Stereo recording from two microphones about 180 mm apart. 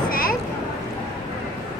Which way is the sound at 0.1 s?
50° left (ahead or behind).